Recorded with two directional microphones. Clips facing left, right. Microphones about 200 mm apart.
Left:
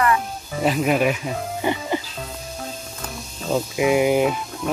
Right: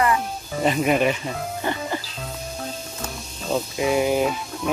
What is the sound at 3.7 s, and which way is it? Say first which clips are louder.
Speech: left 3 dB; 15° left (ahead or behind).